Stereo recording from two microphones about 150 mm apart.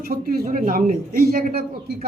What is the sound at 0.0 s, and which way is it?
Speech, 90° right.